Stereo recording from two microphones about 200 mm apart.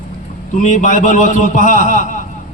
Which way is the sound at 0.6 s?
40° left (ahead or behind).